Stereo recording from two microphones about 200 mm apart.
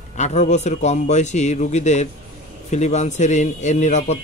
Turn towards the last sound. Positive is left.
turn(degrees=35)  # may be behind; listen again after turning